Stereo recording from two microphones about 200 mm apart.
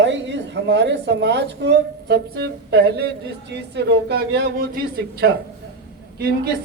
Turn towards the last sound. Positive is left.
turn(degrees=-50)  # may be behind; listen again after turning